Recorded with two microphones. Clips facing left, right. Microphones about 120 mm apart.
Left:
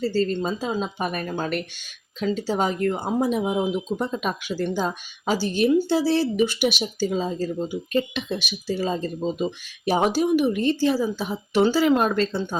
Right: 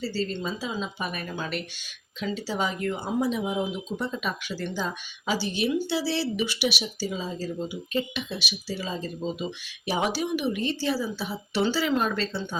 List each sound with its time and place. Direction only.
0.0 s speech: 45° left (ahead or behind)